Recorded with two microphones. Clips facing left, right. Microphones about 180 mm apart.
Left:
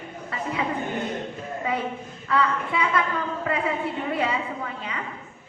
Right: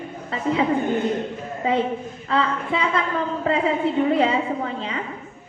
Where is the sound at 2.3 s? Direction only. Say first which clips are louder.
Right 2 dB; 25° right (ahead or behind).